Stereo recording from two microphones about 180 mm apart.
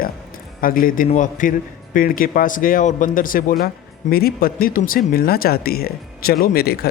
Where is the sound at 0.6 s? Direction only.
50° left (ahead or behind).